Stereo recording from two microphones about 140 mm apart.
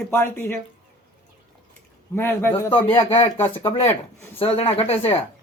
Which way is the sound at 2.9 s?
40° left (ahead or behind).